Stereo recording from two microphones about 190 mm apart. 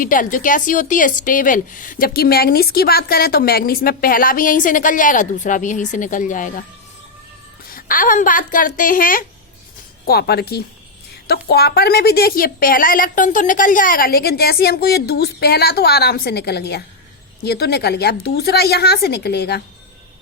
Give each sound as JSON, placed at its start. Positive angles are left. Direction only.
{"t": 0.0, "sound": "a woman's voice", "side_deg": 45}
{"t": 7.7, "sound": "a woman's voice", "side_deg": 50}